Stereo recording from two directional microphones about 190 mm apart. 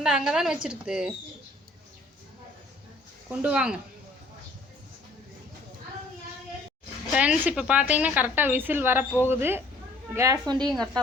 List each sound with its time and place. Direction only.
0.0 s a woman's voice: 5° right (ahead or behind)
3.4 s a woman's voice: 5° right (ahead or behind)
7.1 s a woman's voice: 5° right (ahead or behind); by 10.7 s 20° right (ahead or behind)
10.7 s a woman's voice: 5° left (ahead or behind)